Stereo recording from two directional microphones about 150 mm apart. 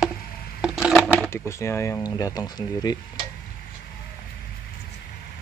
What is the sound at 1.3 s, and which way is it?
Speech, 20° left (ahead or behind).